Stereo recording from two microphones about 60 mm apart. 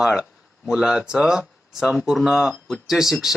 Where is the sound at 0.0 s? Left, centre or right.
Centre.